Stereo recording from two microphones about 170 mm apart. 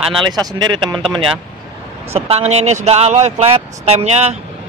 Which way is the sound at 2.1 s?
35° right (ahead or behind).